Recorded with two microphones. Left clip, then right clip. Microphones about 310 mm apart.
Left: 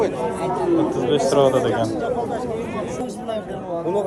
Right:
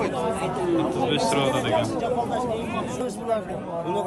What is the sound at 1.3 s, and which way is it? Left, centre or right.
Speech, centre.